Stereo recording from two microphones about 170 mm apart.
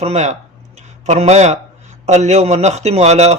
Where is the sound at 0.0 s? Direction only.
40° right (ahead or behind).